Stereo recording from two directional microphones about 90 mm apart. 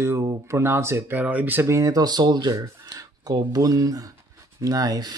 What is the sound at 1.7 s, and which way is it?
Speech, 40° right (ahead or behind).